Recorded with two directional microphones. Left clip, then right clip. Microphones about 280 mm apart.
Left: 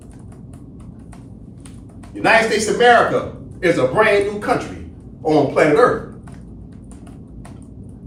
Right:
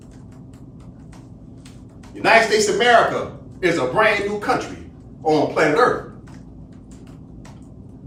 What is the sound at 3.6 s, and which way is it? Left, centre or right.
A man's voice, centre.